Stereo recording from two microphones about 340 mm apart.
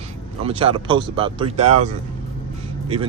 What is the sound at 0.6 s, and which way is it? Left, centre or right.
Speech, centre.